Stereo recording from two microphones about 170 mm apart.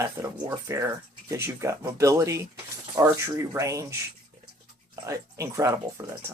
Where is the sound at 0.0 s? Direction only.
15° right (ahead or behind).